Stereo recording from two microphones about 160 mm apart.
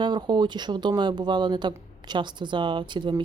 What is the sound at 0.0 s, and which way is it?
Speech, 25° right (ahead or behind).